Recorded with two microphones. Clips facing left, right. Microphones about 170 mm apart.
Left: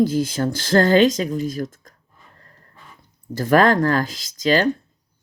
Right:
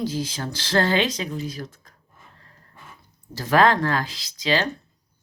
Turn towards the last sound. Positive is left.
turn(degrees=45)  # may be behind; listen again after turning